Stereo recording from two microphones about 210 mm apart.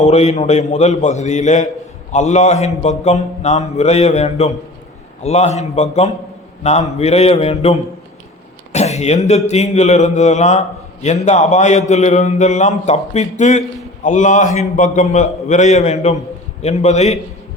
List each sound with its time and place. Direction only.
0.1 s speech: 30° left (ahead or behind)